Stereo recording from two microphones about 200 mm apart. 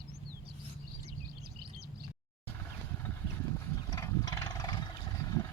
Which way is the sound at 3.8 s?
15° left (ahead or behind).